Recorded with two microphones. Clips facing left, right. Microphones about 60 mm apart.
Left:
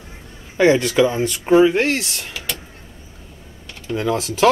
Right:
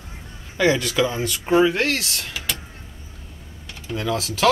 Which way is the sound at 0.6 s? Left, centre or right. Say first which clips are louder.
Left 5 dB; left.